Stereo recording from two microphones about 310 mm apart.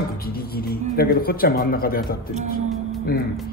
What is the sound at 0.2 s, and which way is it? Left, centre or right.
Music, left.